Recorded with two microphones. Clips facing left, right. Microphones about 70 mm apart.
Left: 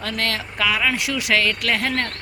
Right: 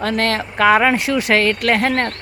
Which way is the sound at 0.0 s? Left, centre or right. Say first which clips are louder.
Right 7 dB; right.